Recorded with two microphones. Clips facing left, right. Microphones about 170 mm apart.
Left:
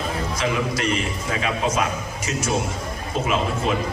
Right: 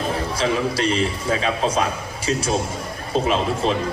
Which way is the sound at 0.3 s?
30° right (ahead or behind).